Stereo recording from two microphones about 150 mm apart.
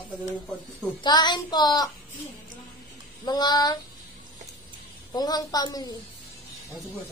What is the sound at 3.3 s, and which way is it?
Speech, 30° left (ahead or behind).